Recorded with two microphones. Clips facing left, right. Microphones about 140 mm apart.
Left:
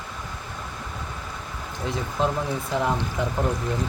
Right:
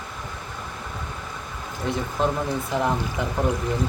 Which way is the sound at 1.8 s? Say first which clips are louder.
Right 1 dB; centre (ahead or behind).